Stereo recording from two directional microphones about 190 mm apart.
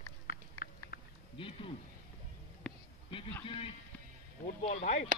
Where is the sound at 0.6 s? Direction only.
50° left (ahead or behind).